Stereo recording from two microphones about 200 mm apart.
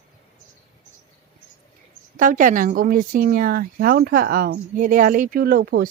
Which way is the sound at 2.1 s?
40° right (ahead or behind).